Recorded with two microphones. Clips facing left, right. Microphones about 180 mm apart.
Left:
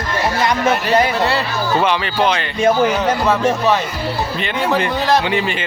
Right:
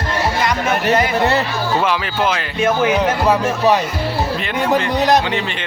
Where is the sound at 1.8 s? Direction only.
Centre (ahead or behind).